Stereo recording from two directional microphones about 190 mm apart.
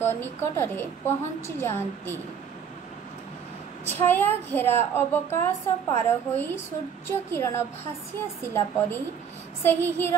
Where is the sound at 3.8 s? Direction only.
10° left (ahead or behind).